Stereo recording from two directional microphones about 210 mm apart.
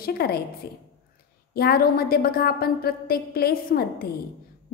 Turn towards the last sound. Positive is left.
turn(degrees=45)  # may be behind; listen again after turning